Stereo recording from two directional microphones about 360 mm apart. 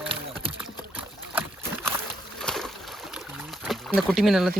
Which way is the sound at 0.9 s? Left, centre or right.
Centre.